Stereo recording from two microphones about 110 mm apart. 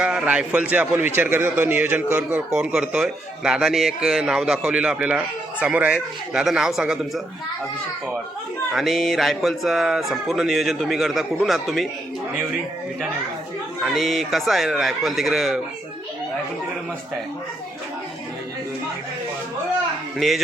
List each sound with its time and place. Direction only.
0.0 s speech: 5° right (ahead or behind)
2.5 s speech: 5° right (ahead or behind)
8.7 s speech: centre (ahead or behind)
13.8 s speech: centre (ahead or behind)
20.1 s speech: centre (ahead or behind)